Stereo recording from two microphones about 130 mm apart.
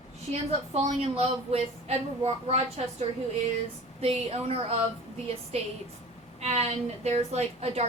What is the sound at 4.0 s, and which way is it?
A woman's voice, 50° right (ahead or behind).